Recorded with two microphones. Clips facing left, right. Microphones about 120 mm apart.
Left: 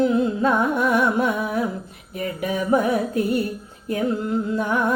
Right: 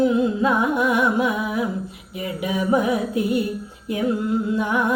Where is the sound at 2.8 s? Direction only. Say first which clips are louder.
Even; 40° left (ahead or behind).